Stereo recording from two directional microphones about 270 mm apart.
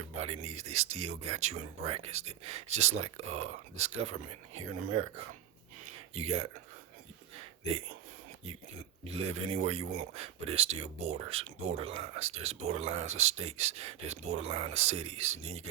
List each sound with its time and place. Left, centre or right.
0.2 s speech: right
6.1 s speech: right
9.0 s speech: right